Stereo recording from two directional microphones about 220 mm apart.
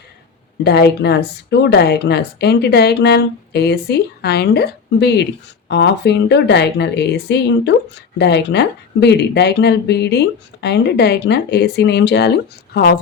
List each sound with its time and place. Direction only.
0.6 s speech: 50° left (ahead or behind)